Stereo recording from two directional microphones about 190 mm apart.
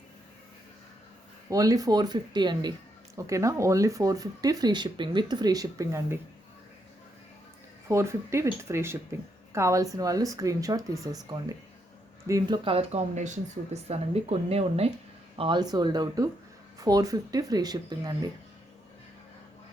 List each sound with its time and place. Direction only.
1.5 s speech: 15° right (ahead or behind)
7.9 s a woman's voice: 15° right (ahead or behind)